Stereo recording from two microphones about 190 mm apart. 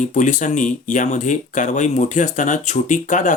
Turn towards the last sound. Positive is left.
turn(degrees=40)  # may be behind; listen again after turning